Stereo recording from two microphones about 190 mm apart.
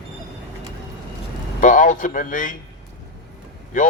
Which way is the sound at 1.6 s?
40° left (ahead or behind).